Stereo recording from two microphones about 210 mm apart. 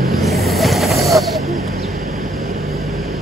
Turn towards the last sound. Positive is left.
turn(degrees=0)  # may be behind; listen again after turning